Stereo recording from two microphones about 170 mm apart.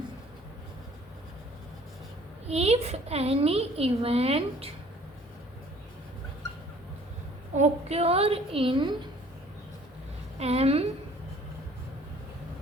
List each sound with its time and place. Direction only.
2.5 s a woman's voice: 40° right (ahead or behind)
7.5 s a woman's voice: 40° right (ahead or behind)
10.3 s a woman's voice: 35° right (ahead or behind)